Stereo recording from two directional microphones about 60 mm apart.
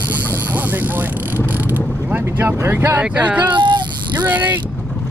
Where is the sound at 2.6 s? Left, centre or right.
Right.